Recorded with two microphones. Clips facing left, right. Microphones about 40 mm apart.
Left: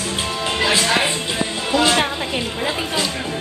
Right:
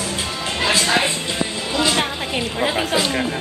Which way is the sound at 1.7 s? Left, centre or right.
Centre.